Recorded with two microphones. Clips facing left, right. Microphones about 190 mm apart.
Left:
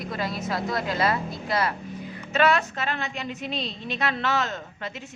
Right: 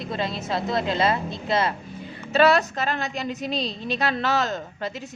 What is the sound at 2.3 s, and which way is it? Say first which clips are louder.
A woman's voice: right 4 dB; 35° right (ahead or behind).